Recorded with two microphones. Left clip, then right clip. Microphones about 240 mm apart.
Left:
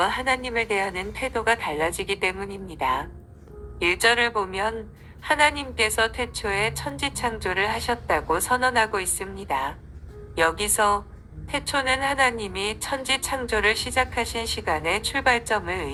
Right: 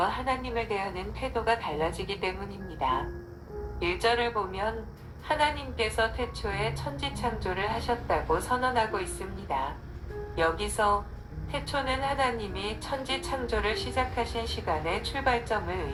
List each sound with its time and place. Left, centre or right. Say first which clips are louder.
0.0 s a woman's voice: left 5 dB; left